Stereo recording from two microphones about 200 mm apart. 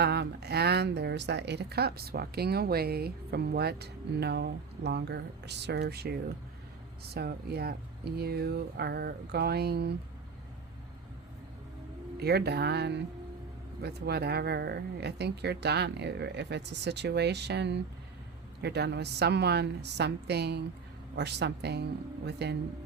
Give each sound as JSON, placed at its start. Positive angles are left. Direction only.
{"t": 0.0, "sound": "a woman's voice", "side_deg": -55}
{"t": 12.2, "sound": "a woman's voice", "side_deg": -55}